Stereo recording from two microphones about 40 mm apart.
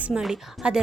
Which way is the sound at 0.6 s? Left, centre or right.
Right.